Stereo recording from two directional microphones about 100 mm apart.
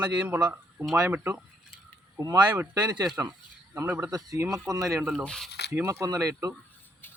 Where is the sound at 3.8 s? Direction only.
20° right (ahead or behind).